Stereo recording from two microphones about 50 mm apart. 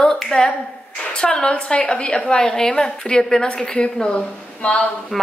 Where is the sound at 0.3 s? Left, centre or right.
Centre.